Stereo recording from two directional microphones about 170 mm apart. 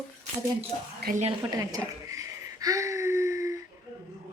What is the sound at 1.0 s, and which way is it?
Speech, 70° right (ahead or behind).